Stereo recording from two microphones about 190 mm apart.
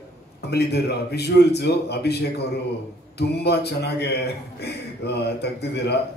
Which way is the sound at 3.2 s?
60° left (ahead or behind).